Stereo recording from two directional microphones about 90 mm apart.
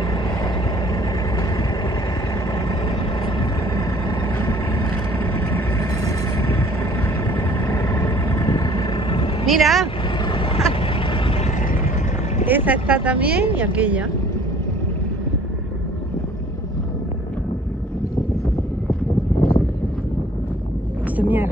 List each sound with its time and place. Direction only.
0.9 s vehicle: 45° left (ahead or behind)
3.3 s vehicle: 60° left (ahead or behind)
5.2 s vehicle: 25° left (ahead or behind)
5.8 s vehicle: 40° left (ahead or behind); by 7.6 s 20° left (ahead or behind)
8.3 s vehicle: 35° left (ahead or behind)
9.1 s vehicle: 65° left (ahead or behind)
9.5 s vehicle: centre (ahead or behind)
10.1 s vehicle: 65° left (ahead or behind)
12.4 s speech: 20° right (ahead or behind)
21.2 s vehicle: 20° right (ahead or behind)